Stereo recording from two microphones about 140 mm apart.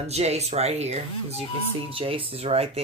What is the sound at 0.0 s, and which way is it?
Speech, 50° right (ahead or behind).